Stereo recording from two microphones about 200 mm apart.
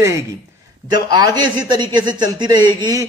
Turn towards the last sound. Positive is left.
turn(degrees=-20)  # may be behind; listen again after turning